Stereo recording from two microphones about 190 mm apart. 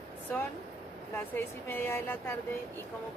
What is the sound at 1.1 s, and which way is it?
Speech, 10° left (ahead or behind).